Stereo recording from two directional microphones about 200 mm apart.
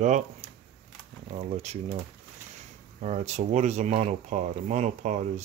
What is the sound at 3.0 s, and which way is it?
Speech, 35° right (ahead or behind).